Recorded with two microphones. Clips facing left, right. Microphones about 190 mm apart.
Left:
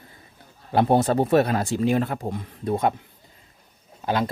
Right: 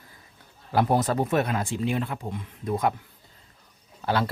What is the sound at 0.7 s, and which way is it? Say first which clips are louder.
Speech: left 4 dB; 25° left (ahead or behind).